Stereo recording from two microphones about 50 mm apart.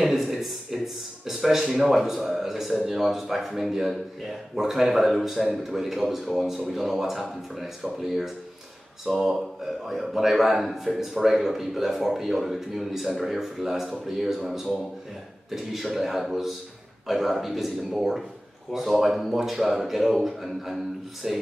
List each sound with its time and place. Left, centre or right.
0.0 s speech: centre